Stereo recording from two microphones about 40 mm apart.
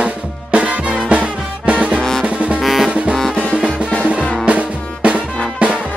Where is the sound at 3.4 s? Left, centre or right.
Right.